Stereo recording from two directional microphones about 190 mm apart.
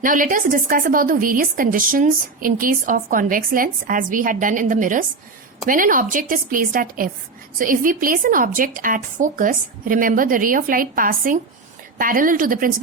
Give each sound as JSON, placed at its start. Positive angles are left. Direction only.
{"t": 0.0, "sound": "a woman's voice", "side_deg": -45}